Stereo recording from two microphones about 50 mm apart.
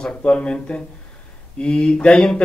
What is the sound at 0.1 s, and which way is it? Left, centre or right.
Speech, left.